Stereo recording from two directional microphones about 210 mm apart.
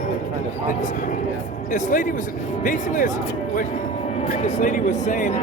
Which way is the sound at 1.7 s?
40° left (ahead or behind).